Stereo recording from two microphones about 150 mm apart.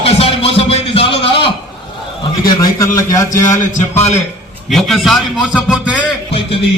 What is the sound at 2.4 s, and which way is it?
Speech, 25° left (ahead or behind).